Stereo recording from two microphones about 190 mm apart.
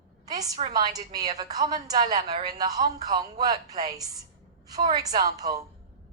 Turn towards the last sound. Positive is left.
turn(degrees=-20)  # may be behind; listen again after turning